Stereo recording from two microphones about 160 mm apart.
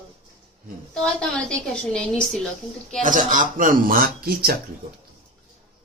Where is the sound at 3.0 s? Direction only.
55° right (ahead or behind).